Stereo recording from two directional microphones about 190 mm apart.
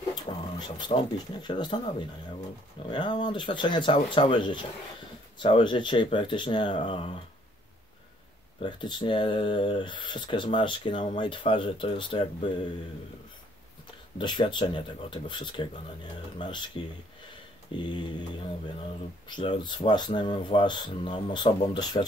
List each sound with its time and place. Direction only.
0.1 s speech: 25° left (ahead or behind)
8.5 s speech: 25° left (ahead or behind)
14.1 s speech: 25° left (ahead or behind)
19.2 s speech: 25° left (ahead or behind)